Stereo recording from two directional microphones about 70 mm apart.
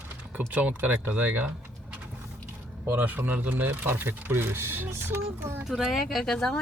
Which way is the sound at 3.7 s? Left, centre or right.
Right.